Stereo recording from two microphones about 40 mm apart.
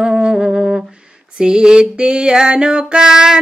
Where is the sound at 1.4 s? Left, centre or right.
Right.